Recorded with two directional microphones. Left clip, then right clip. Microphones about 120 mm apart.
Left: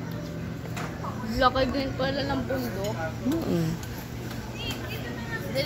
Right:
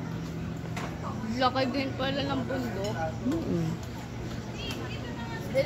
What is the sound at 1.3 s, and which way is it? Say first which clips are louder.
A man's voice: left 4 dB; 10° right (ahead or behind).